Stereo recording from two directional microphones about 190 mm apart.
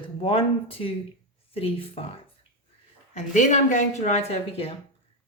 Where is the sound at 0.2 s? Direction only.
30° left (ahead or behind).